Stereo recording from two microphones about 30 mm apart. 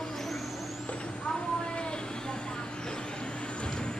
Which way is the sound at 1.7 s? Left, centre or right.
Left.